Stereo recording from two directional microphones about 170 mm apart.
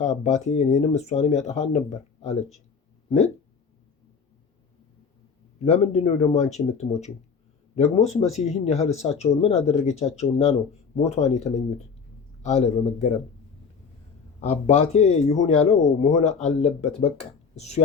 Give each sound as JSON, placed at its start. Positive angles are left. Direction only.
{"t": 0.0, "sound": "speech", "side_deg": 40}
{"t": 5.6, "sound": "a man's voice", "side_deg": 40}
{"t": 14.4, "sound": "speech", "side_deg": 40}